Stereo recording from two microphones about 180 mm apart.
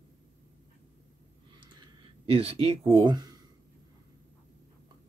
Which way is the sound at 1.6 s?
25° right (ahead or behind).